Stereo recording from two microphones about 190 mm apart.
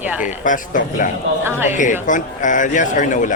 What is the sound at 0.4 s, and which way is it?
A man's voice, 45° left (ahead or behind).